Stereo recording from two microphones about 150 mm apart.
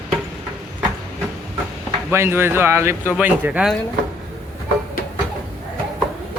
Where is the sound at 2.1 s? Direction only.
15° right (ahead or behind).